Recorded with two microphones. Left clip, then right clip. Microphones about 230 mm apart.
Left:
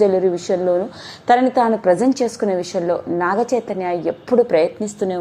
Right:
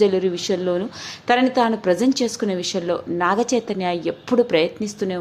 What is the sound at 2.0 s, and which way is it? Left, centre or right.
Speech, centre.